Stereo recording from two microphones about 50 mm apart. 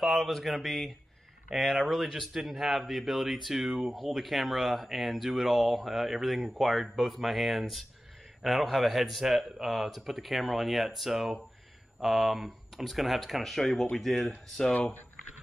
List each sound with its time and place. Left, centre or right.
0.0 s speech: centre
14.7 s speech: left